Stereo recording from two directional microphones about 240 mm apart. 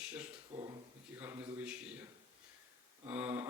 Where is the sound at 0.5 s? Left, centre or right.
Centre.